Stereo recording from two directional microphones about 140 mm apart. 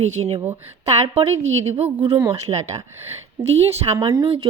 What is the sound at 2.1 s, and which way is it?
Speech, 35° right (ahead or behind).